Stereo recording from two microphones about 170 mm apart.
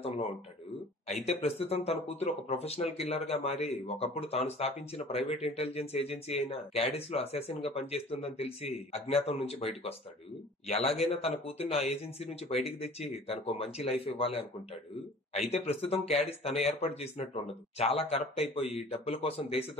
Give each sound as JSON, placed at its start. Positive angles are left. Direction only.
{"t": 1.0, "sound": "speech", "side_deg": 40}
{"t": 11.0, "sound": "speech", "side_deg": 35}